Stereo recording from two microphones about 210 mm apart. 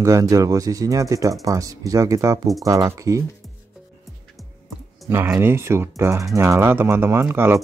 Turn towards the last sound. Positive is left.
turn(degrees=-10)  # may be behind; listen again after turning